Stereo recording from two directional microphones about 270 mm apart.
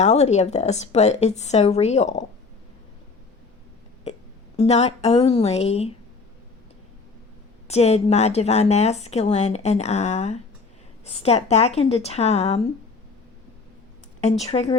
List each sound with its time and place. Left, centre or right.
0.0 s a woman's voice: left
4.5 s a woman's voice: left
7.7 s a woman's voice: left
14.2 s a woman's voice: left